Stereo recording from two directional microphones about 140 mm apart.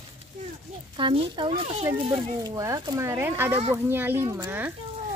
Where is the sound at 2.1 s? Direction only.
30° right (ahead or behind).